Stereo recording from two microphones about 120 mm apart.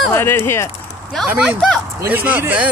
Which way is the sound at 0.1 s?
20° left (ahead or behind).